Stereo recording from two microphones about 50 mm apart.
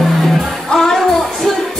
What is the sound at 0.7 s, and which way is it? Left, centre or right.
Music, centre.